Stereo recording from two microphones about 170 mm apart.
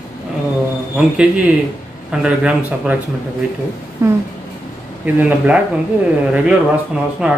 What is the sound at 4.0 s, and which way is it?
Speech, 15° right (ahead or behind).